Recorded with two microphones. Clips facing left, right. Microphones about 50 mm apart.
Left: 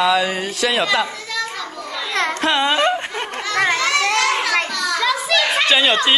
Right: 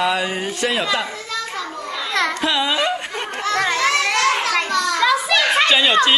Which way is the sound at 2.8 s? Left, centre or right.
Centre.